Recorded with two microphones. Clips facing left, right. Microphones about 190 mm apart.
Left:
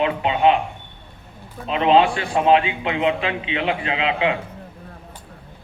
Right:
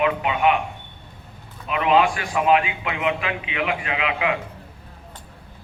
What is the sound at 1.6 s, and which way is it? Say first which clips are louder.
A man's voice: left 3 dB; 30° left (ahead or behind).